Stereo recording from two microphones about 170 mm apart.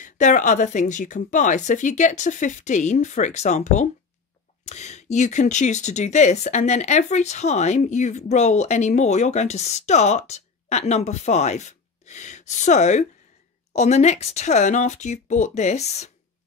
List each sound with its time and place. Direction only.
0.0 s speech: 50° left (ahead or behind)